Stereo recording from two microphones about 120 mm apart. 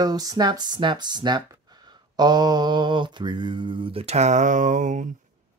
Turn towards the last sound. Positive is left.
turn(degrees=-90)